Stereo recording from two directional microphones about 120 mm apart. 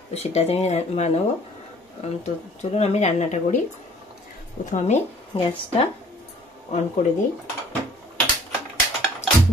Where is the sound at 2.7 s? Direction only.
65° left (ahead or behind).